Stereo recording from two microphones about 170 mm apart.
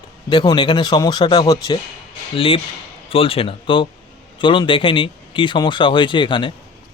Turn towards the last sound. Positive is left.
turn(degrees=30)  # may be behind; listen again after turning